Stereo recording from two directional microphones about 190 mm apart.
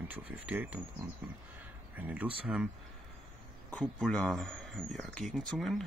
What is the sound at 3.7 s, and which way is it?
Speech, 5° left (ahead or behind).